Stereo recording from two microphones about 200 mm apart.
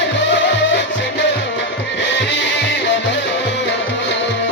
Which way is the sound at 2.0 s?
65° left (ahead or behind).